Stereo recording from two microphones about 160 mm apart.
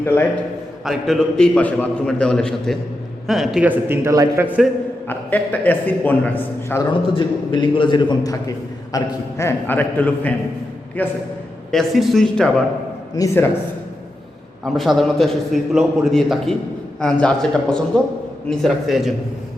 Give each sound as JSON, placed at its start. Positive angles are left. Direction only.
{"t": 0.0, "sound": "a man's voice", "side_deg": 15}
{"t": 0.9, "sound": "a man's voice", "side_deg": 0}
{"t": 4.4, "sound": "a man's voice", "side_deg": -5}
{"t": 5.0, "sound": "a man's voice", "side_deg": 10}
{"t": 6.9, "sound": "a man's voice", "side_deg": 30}
{"t": 13.1, "sound": "a man's voice", "side_deg": 20}
{"t": 14.6, "sound": "a man's voice", "side_deg": 0}